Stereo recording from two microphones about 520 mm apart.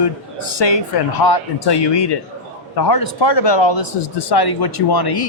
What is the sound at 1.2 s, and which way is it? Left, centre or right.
Speech, left.